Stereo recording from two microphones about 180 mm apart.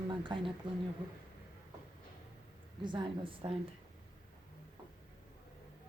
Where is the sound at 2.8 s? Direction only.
25° right (ahead or behind).